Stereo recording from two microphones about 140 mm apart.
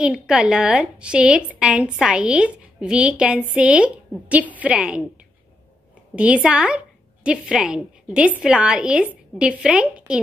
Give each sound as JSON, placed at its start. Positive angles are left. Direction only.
{"t": 0.0, "sound": "a woman's voice", "side_deg": -5}
{"t": 6.1, "sound": "a woman's voice", "side_deg": -10}